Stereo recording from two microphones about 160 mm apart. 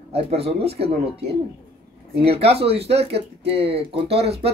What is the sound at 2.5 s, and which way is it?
Speech, 40° right (ahead or behind).